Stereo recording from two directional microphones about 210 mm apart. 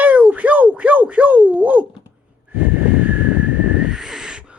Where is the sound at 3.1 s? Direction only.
5° right (ahead or behind).